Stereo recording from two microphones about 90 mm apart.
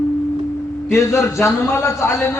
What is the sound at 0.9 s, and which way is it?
A man's voice, 30° left (ahead or behind).